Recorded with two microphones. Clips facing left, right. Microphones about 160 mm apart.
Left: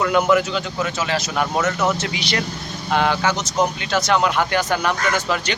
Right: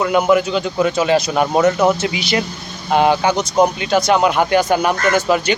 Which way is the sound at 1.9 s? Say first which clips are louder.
Right 5 dB; 10° right (ahead or behind).